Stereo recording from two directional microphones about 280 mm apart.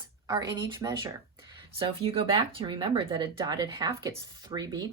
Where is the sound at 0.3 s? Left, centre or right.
Centre.